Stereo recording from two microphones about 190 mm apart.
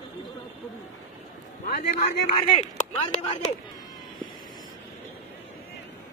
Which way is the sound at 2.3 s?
30° left (ahead or behind).